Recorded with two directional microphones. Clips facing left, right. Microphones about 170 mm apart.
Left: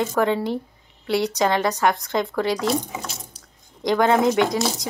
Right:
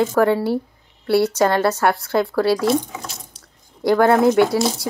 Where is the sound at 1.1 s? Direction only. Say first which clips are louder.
Right 4 dB; 15° left (ahead or behind).